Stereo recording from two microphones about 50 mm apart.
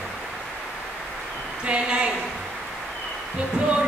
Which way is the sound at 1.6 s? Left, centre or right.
Right.